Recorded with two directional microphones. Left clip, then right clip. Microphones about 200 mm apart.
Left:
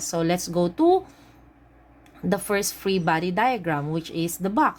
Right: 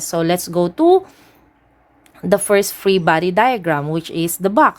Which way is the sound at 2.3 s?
25° right (ahead or behind).